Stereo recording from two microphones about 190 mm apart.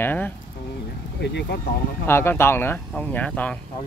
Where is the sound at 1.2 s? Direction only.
60° left (ahead or behind).